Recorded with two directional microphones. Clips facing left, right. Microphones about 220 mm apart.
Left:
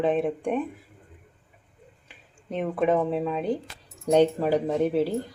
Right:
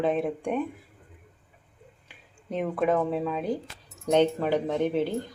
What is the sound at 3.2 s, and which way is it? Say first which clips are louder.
Speech: left 2 dB; centre (ahead or behind).